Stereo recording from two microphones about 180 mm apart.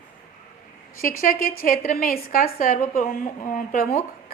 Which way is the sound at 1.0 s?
50° left (ahead or behind).